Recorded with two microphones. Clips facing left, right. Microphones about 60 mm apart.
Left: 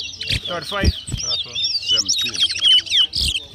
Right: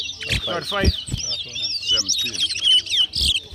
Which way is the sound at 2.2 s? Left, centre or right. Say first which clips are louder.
Left 3 dB; left.